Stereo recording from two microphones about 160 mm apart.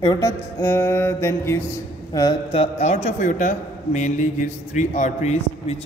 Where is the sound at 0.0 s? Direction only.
25° left (ahead or behind).